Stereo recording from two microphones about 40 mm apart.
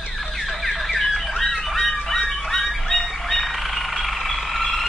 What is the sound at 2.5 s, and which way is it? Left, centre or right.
Vehicle, centre.